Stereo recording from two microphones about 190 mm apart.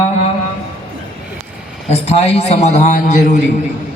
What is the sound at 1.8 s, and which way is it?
A man's voice, 35° left (ahead or behind).